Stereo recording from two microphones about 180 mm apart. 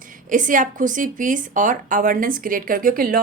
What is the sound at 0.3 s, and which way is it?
A woman's voice, 45° right (ahead or behind).